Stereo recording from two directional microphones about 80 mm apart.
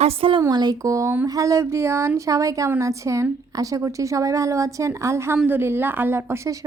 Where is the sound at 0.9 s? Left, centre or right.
Right.